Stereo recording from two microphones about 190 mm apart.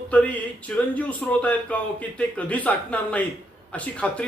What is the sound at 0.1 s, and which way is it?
A man's voice, 10° left (ahead or behind).